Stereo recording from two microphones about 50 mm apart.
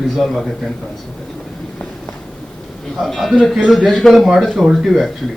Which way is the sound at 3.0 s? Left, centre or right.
Centre.